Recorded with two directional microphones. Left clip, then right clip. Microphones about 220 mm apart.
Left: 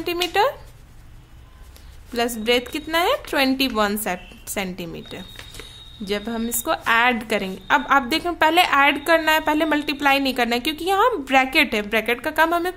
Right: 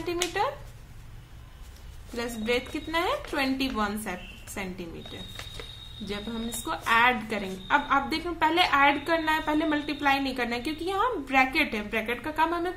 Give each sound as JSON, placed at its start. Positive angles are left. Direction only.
{"t": 0.0, "sound": "a woman's voice", "side_deg": 45}
{"t": 2.1, "sound": "a woman's voice", "side_deg": 50}